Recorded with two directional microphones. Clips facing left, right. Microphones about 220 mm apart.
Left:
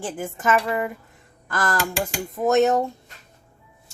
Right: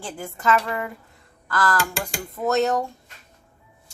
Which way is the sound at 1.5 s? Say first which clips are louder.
Right 2 dB; 20° left (ahead or behind).